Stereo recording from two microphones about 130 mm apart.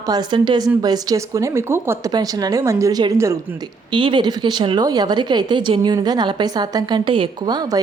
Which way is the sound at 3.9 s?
40° right (ahead or behind).